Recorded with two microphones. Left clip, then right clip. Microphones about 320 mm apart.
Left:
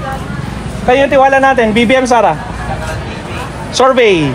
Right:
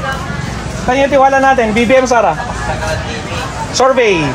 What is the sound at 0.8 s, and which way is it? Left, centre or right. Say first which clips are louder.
A man's voice: left 2 dB; left.